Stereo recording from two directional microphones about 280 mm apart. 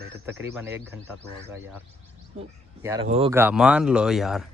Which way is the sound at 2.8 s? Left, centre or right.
Centre.